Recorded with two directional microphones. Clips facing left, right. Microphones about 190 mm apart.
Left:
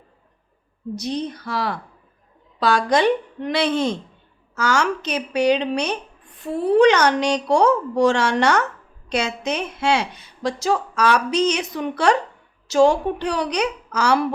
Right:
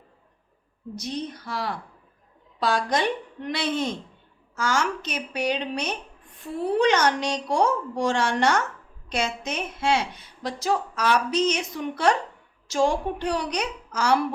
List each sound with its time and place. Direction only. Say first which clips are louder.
0.9 s a woman's voice: left 5 dB; 75° left (ahead or behind)